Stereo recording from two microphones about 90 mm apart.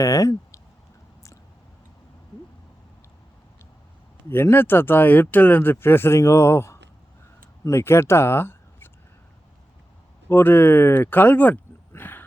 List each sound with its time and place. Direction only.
0.0 s speech: 40° left (ahead or behind)
4.3 s speech: 25° left (ahead or behind)
10.2 s speech: 25° left (ahead or behind)